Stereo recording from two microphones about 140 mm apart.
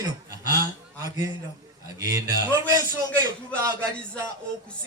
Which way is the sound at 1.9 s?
25° right (ahead or behind).